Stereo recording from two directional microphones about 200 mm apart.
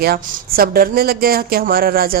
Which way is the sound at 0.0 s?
50° right (ahead or behind).